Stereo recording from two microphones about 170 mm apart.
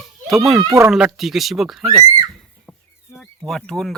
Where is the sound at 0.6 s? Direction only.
20° right (ahead or behind).